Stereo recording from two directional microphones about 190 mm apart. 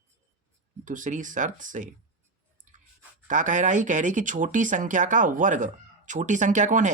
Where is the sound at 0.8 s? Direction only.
45° right (ahead or behind).